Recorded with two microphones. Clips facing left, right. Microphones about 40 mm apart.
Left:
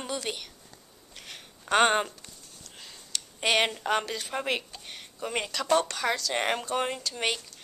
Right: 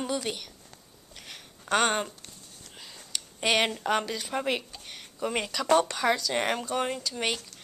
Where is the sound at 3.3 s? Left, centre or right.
Centre.